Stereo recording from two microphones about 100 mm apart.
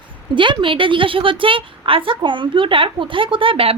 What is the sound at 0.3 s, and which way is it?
A woman's voice, 55° right (ahead or behind).